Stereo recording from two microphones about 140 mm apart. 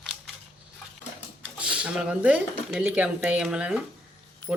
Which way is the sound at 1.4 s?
10° right (ahead or behind).